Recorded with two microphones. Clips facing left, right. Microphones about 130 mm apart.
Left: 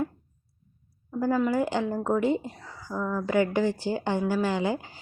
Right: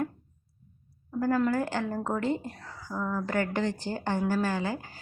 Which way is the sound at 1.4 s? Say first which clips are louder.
Left 2 dB; 15° left (ahead or behind).